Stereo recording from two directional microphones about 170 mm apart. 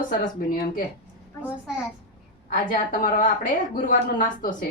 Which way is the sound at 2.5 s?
55° left (ahead or behind).